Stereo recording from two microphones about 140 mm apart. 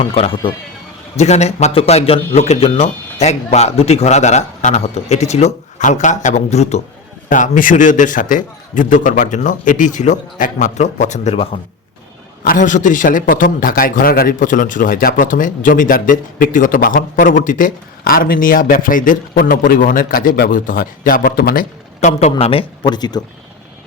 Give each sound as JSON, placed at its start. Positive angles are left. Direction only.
{"t": 0.0, "sound": "a man's voice", "side_deg": 45}
{"t": 1.1, "sound": "a man's voice", "side_deg": 55}
{"t": 7.3, "sound": "a man's voice", "side_deg": 65}
{"t": 12.5, "sound": "a man's voice", "side_deg": 65}
{"t": 22.2, "sound": "speech", "side_deg": 45}